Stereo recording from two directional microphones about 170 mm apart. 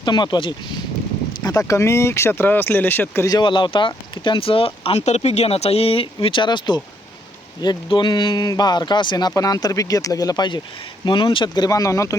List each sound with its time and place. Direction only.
0.0 s speech: 25° left (ahead or behind)